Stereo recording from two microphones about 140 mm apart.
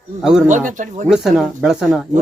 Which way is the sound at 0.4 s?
65° right (ahead or behind).